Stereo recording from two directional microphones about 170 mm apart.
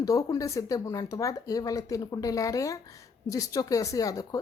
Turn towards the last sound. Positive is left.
turn(degrees=20)  # may be behind; listen again after turning